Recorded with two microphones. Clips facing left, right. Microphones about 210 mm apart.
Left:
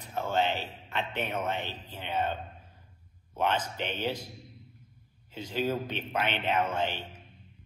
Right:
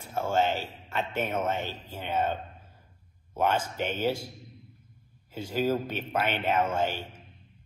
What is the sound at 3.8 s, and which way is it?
Speech, 45° right (ahead or behind).